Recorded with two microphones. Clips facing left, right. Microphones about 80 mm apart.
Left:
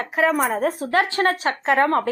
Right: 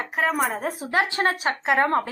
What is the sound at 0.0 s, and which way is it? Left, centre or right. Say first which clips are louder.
Speech: left 4 dB; centre.